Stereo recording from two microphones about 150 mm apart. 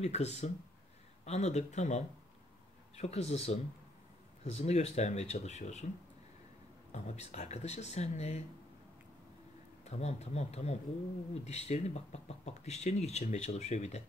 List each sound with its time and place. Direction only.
0.0 s speech: 45° left (ahead or behind)
6.9 s speech: 50° left (ahead or behind)
9.8 s speech: 45° left (ahead or behind)